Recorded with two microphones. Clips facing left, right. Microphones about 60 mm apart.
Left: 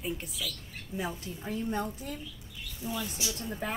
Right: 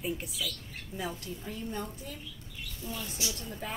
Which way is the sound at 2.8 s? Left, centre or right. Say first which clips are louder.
Left 4 dB; centre.